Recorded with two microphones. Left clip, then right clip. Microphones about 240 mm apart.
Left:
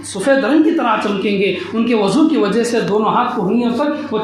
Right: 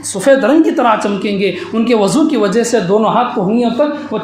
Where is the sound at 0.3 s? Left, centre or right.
Right.